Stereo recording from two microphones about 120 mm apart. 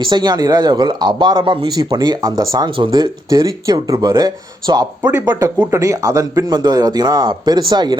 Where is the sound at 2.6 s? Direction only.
45° right (ahead or behind).